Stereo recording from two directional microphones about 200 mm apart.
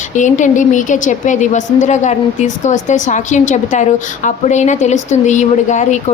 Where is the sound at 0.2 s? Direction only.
40° left (ahead or behind).